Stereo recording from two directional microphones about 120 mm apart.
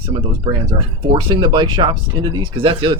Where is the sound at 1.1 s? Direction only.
40° right (ahead or behind).